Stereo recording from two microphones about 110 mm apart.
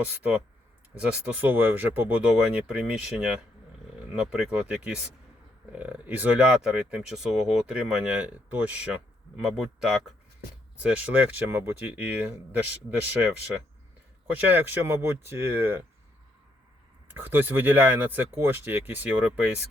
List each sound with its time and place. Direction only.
1.0 s speech: 15° right (ahead or behind)
14.3 s speech: 15° right (ahead or behind)
17.1 s speech: 20° right (ahead or behind)